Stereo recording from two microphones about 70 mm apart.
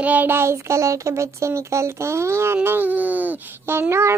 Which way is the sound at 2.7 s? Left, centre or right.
Right.